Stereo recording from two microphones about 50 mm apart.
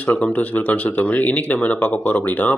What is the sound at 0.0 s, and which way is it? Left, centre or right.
Speech, left.